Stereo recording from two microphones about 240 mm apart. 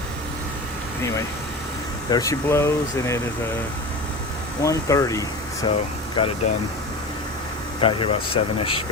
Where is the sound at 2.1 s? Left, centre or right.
Centre.